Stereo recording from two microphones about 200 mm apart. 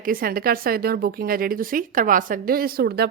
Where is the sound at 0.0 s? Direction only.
45° right (ahead or behind).